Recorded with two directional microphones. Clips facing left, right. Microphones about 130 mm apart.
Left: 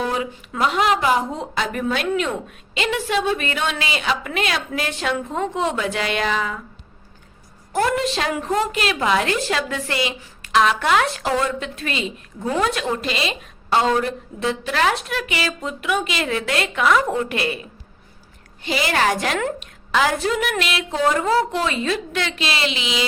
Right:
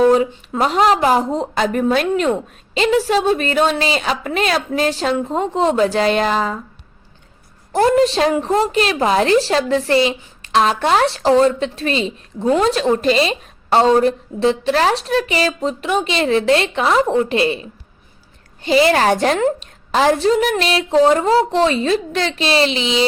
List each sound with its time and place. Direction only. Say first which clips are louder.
0.0 s a woman's voice: right 11 dB; 40° right (ahead or behind)
7.7 s a woman's voice: right 7 dB; 30° right (ahead or behind)